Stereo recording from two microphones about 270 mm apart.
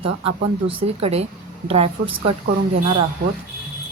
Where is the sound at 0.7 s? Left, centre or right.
Right.